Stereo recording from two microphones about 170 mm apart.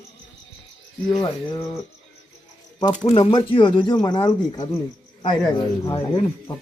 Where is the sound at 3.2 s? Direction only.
30° left (ahead or behind).